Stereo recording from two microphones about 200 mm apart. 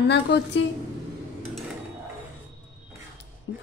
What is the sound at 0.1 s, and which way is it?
Speech, 60° left (ahead or behind).